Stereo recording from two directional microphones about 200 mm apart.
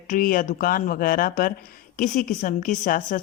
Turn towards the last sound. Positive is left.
turn(degrees=45)  # may be behind; listen again after turning